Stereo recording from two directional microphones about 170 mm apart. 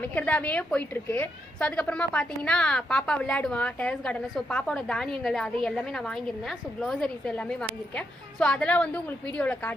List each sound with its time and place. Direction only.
0.0 s a woman's voice: 10° left (ahead or behind)